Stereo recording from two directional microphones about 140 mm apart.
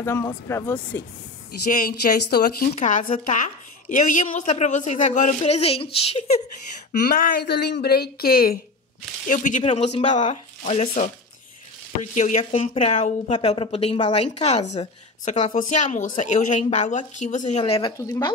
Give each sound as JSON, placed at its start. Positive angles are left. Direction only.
{"t": 0.5, "sound": "speech", "side_deg": 15}
{"t": 1.7, "sound": "speech", "side_deg": 80}
{"t": 2.7, "sound": "a woman's voice", "side_deg": 60}
{"t": 6.9, "sound": "speech", "side_deg": 80}
{"t": 9.3, "sound": "a woman's voice", "side_deg": 65}
{"t": 17.9, "sound": "speech", "side_deg": 25}